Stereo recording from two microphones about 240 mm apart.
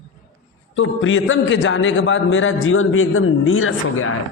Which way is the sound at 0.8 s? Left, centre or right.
Left.